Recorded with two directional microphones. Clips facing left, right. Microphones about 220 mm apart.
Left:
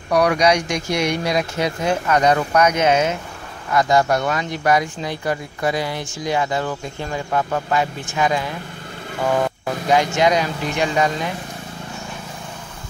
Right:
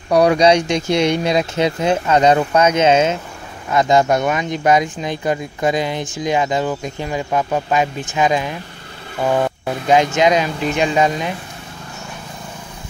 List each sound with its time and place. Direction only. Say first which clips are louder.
0.1 s speech: right 4 dB; 25° right (ahead or behind)
9.8 s speech: right 3 dB; 20° right (ahead or behind)